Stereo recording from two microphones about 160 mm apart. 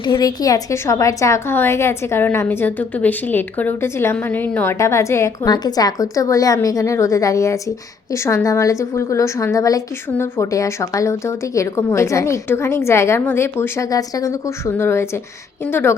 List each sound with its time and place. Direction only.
0.0 s a woman's voice: 25° left (ahead or behind)